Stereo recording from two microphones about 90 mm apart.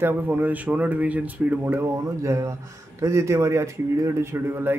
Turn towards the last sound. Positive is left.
turn(degrees=-25)  # may be behind; listen again after turning